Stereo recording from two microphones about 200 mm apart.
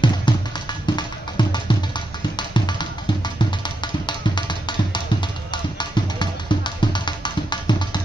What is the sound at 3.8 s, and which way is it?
Music, 20° left (ahead or behind).